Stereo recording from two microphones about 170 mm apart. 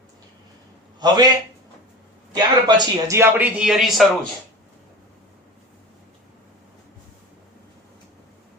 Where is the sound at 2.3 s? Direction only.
25° right (ahead or behind).